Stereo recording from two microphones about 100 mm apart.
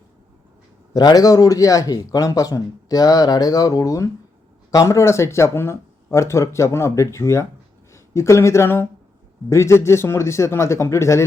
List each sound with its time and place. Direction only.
0.9 s speech: 40° left (ahead or behind)